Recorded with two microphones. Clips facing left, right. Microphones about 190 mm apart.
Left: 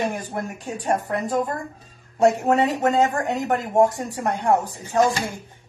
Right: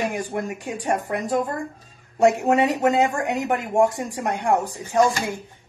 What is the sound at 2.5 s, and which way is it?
Speech, 10° right (ahead or behind).